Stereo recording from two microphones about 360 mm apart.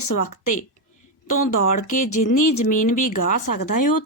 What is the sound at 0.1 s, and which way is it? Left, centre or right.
Speech, left.